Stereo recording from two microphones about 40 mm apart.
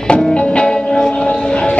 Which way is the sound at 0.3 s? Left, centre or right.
Left.